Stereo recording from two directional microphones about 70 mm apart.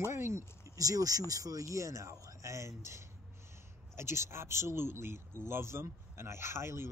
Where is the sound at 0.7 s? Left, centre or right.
Right.